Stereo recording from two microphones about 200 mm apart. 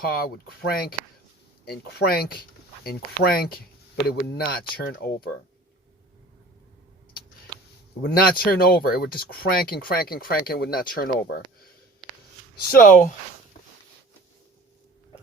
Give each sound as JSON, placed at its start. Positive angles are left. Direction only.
{"t": 0.0, "sound": "speech", "side_deg": 50}
{"t": 8.0, "sound": "speech", "side_deg": 50}
{"t": 12.7, "sound": "speech", "side_deg": 40}